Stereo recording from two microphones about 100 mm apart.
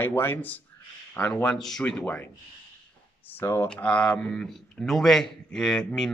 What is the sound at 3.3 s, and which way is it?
Speech, 25° left (ahead or behind).